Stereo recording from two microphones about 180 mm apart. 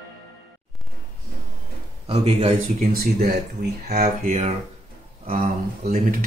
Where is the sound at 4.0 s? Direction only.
35° right (ahead or behind).